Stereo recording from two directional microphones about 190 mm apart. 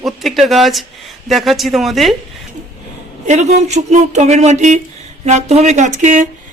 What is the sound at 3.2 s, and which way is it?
Speech, 35° right (ahead or behind).